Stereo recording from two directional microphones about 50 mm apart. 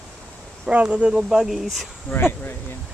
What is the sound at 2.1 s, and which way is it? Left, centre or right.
Speech, left.